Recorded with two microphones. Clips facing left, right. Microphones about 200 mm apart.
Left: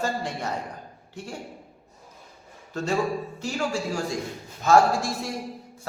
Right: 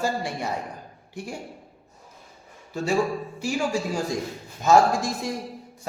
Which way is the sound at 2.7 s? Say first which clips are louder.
Right 2 dB; 10° right (ahead or behind).